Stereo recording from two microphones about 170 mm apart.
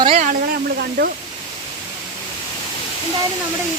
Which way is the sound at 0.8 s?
65° right (ahead or behind).